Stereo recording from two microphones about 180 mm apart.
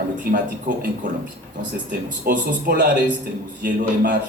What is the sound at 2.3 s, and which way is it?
A man's voice, 55° right (ahead or behind).